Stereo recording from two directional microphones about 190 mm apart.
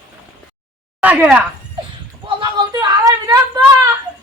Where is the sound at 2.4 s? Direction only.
20° right (ahead or behind).